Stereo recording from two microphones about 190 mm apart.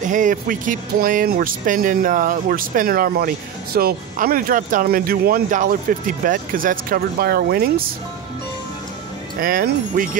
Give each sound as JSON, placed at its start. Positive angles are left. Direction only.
{"t": 0.0, "sound": "speech", "side_deg": -40}
{"t": 9.4, "sound": "speech", "side_deg": -50}